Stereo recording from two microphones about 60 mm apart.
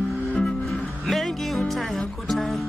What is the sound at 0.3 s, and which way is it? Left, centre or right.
Music, centre.